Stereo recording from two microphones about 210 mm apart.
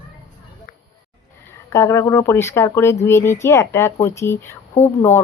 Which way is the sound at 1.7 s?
15° left (ahead or behind).